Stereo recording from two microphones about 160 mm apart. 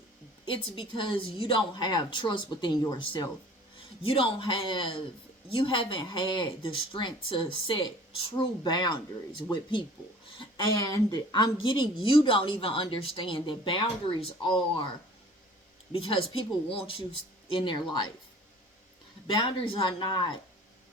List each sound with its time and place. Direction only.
0.4 s speech: 30° left (ahead or behind)
10.9 s speech: 25° left (ahead or behind)
15.9 s speech: 35° left (ahead or behind)
19.4 s speech: 30° left (ahead or behind)